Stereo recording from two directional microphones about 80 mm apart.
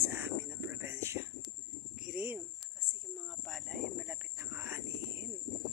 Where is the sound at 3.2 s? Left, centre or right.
Centre.